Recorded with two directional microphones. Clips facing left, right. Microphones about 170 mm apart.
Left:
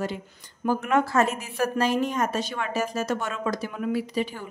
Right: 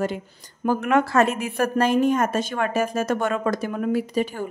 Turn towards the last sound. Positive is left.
turn(degrees=-45)  # may be behind; listen again after turning